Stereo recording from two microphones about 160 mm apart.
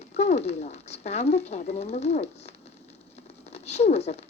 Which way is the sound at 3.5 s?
40° left (ahead or behind).